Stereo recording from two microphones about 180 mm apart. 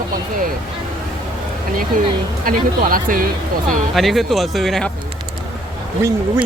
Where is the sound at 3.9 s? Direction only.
Centre (ahead or behind).